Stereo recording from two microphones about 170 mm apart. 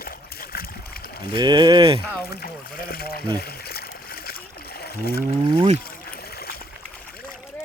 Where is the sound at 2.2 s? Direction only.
65° left (ahead or behind).